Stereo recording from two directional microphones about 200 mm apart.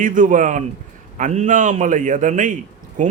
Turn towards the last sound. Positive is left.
turn(degrees=-40)  # may be behind; listen again after turning